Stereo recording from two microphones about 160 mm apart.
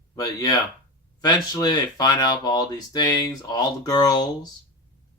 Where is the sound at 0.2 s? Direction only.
25° left (ahead or behind).